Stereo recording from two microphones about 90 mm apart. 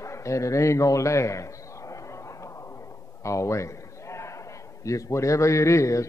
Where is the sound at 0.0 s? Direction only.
35° left (ahead or behind).